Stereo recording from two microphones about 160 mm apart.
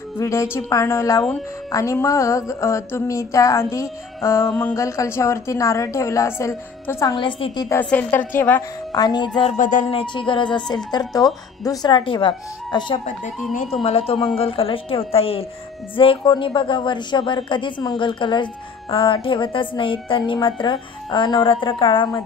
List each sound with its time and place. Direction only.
0.2 s a woman's voice: 20° left (ahead or behind)
1.7 s a sound: 20° left (ahead or behind)
7.2 s speech: 35° left (ahead or behind)
7.8 s a woman's voice: 10° left (ahead or behind)
8.9 s a sound: 25° left (ahead or behind)
9.6 s speech: 55° left (ahead or behind)
9.8 s speech: 35° left (ahead or behind)
10.9 s a sound: 25° left (ahead or behind)
13.7 s speech: 35° left (ahead or behind)